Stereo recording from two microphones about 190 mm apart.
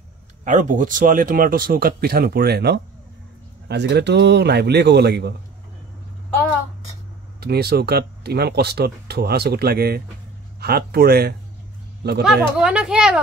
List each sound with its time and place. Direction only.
0.5 s speech: 40° right (ahead or behind); by 5.3 s 60° right (ahead or behind)
7.3 s speech: 55° right (ahead or behind)
12.2 s speech: 5° right (ahead or behind)